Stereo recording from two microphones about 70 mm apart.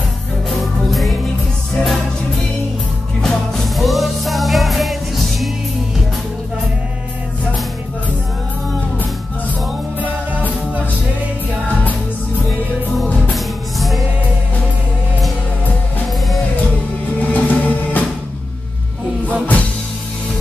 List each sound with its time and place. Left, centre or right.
0.5 s music: centre
13.3 s music: centre
17.2 s music: left